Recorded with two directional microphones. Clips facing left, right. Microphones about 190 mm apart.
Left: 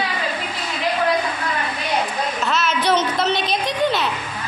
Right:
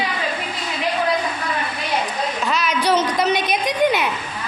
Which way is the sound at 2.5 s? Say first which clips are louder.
Even; 10° right (ahead or behind).